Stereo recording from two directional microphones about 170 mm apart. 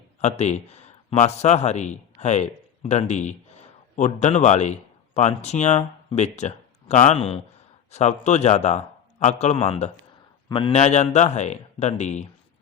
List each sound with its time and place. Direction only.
0.2 s a man's voice: 40° left (ahead or behind)